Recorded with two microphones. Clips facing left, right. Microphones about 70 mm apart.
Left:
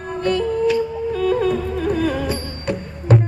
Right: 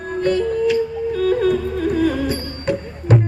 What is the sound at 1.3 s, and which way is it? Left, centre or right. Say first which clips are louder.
Music: right 2 dB; left.